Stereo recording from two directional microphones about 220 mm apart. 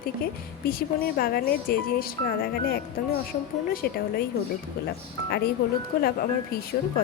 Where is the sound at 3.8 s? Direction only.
45° left (ahead or behind).